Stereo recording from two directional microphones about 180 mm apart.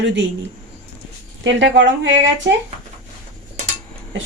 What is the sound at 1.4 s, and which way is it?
Speech, 85° right.